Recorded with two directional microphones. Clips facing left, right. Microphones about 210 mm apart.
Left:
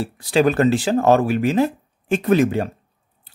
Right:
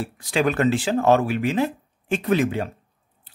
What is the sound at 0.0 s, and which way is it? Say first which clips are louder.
Speech: left 5 dB; 35° left (ahead or behind).